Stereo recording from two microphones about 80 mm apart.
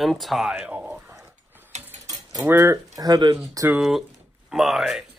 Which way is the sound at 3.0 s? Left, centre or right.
Right.